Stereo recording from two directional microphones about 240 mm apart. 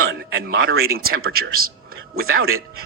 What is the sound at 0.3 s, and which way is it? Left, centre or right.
Speech, right.